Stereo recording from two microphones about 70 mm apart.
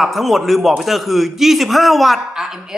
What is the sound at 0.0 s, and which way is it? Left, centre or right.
A woman's voice, centre.